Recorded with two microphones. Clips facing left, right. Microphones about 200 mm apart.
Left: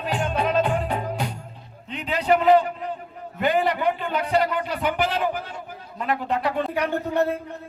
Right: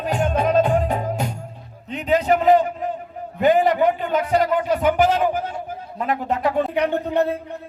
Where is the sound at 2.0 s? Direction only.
45° right (ahead or behind).